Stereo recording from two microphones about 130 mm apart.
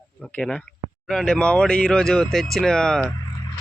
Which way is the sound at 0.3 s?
10° left (ahead or behind).